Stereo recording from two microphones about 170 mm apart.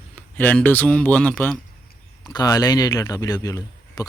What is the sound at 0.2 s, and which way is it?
Speech, 10° left (ahead or behind).